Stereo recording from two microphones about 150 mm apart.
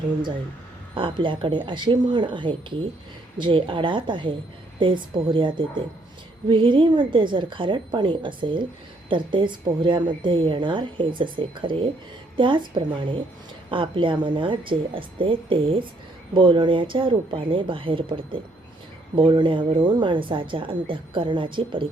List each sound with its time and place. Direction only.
0.9 s a woman's voice: 35° right (ahead or behind)